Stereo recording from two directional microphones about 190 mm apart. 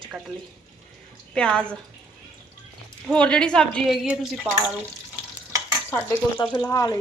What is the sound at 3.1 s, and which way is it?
A woman's voice, 5° left (ahead or behind).